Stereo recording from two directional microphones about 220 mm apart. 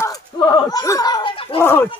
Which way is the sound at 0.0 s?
15° left (ahead or behind).